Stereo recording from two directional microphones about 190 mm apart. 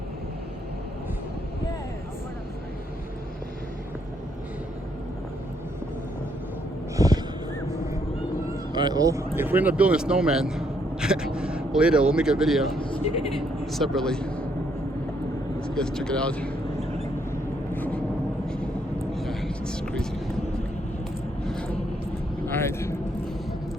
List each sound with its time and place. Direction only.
6.9 s a sound: 20° right (ahead or behind)
8.7 s speech: 20° right (ahead or behind); by 12.8 s centre (ahead or behind)
12.8 s speech: 30° left (ahead or behind)
13.7 s a man's voice: centre (ahead or behind)
15.6 s speech: 5° left (ahead or behind)
17.7 s vehicle: 10° left (ahead or behind)
19.1 s a sound: centre (ahead or behind)
22.4 s speech: 15° left (ahead or behind)